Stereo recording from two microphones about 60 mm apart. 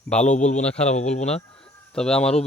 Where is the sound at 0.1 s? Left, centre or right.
Centre.